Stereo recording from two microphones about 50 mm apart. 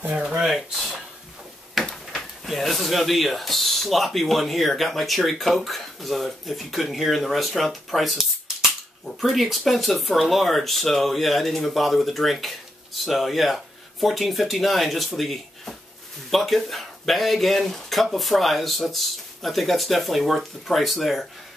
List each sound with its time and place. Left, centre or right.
0.1 s speech: centre
0.4 s speech: centre
1.8 s a sound: centre
2.1 s speech: centre